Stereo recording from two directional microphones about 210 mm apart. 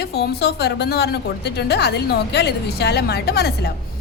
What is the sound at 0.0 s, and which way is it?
A woman's voice, 50° left (ahead or behind).